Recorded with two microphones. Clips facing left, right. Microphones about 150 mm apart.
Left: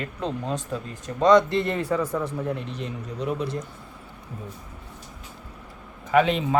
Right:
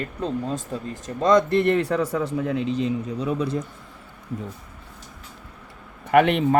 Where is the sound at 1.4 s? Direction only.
55° right (ahead or behind); by 2.8 s 90° right.